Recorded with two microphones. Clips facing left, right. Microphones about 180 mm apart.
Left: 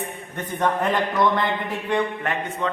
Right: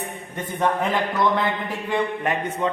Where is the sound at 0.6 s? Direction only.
5° right (ahead or behind).